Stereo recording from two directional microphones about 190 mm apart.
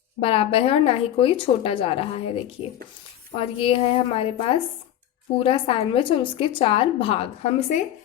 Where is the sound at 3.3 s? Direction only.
30° left (ahead or behind).